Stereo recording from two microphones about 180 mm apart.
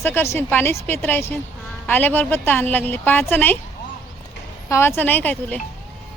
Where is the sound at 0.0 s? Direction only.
15° left (ahead or behind).